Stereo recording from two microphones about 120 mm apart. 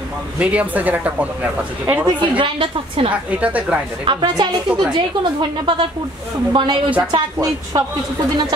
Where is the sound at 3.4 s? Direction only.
10° right (ahead or behind).